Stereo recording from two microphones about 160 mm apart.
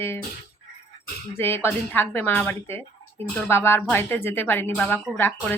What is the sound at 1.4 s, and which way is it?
Speech, 15° left (ahead or behind).